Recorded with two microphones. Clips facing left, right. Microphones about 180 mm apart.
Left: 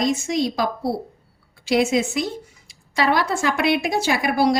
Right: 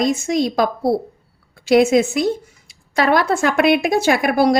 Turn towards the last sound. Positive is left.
turn(degrees=-50)  # may be behind; listen again after turning